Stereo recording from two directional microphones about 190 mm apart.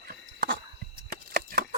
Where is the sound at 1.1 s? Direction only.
55° right (ahead or behind).